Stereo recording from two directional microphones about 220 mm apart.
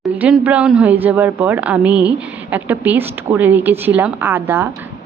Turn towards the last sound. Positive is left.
turn(degrees=-10)  # may be behind; listen again after turning